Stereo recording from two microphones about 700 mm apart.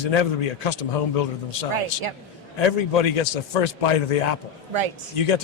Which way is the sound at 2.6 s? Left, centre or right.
Left.